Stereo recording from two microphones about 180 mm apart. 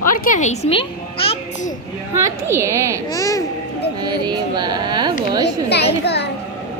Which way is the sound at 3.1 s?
20° left (ahead or behind).